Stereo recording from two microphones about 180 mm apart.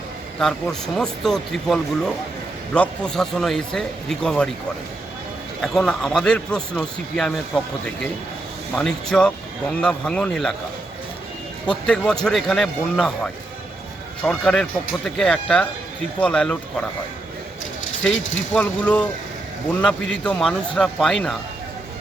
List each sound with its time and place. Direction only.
0.3 s a man's voice: 5° left (ahead or behind)
5.6 s a man's voice: 5° left (ahead or behind)
8.7 s a man's voice: 5° left (ahead or behind)
11.6 s a man's voice: 5° left (ahead or behind)
18.0 s speech: 90° left
18.5 s a man's voice: 5° left (ahead or behind)